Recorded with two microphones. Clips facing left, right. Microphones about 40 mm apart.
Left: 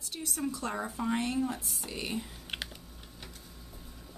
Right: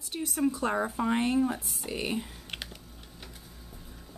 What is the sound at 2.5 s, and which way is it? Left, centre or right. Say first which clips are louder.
Typing: left 1 dB; centre.